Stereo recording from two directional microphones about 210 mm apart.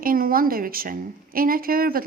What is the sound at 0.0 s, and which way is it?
Speech, 45° right (ahead or behind).